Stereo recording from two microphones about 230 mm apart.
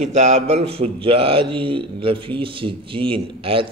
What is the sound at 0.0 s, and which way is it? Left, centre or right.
Speech, right.